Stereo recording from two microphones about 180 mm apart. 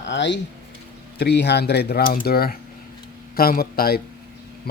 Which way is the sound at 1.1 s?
70° left (ahead or behind).